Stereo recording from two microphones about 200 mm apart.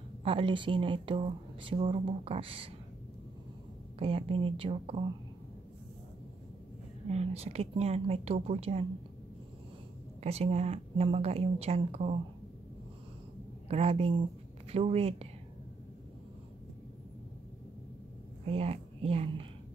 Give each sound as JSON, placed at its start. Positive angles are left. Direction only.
{"t": 0.2, "sound": "speech", "side_deg": -25}
{"t": 4.0, "sound": "speech", "side_deg": -30}
{"t": 7.1, "sound": "a woman's voice", "side_deg": -30}
{"t": 10.2, "sound": "a woman's voice", "side_deg": -30}
{"t": 13.7, "sound": "a woman's voice", "side_deg": -30}
{"t": 18.4, "sound": "a woman's voice", "side_deg": -30}